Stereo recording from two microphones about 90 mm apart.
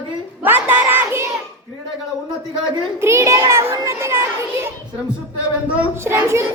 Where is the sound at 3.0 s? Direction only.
30° right (ahead or behind).